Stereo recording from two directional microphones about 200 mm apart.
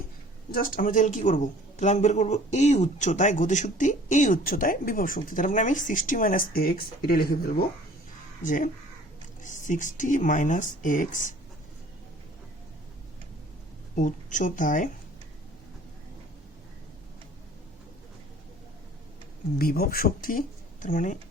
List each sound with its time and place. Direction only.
0.5 s a man's voice: 45° left (ahead or behind)
13.9 s a man's voice: 40° left (ahead or behind)
19.5 s a man's voice: 50° left (ahead or behind)